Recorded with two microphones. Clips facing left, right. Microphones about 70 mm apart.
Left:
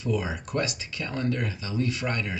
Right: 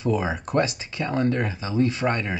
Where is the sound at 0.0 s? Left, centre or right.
Right.